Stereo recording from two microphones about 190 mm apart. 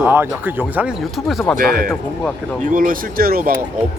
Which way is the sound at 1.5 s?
50° right (ahead or behind).